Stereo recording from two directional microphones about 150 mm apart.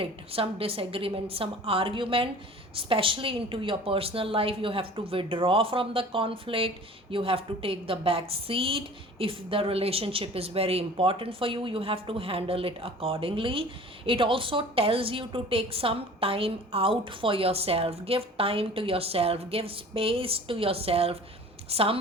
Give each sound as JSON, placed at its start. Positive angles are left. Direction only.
{"t": 0.0, "sound": "a woman's voice", "side_deg": -40}